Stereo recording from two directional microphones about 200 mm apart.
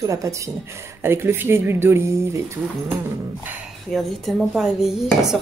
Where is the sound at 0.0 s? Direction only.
15° right (ahead or behind).